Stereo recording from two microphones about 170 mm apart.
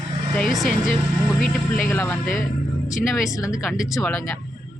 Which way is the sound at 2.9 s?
Centre (ahead or behind).